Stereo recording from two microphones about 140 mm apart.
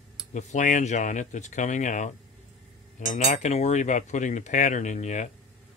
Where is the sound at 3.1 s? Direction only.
60° left (ahead or behind).